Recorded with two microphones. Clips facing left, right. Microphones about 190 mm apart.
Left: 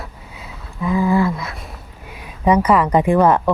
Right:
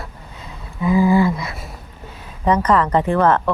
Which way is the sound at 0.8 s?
5° right (ahead or behind).